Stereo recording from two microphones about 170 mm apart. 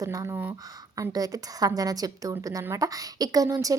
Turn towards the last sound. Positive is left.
turn(degrees=-20)  # may be behind; listen again after turning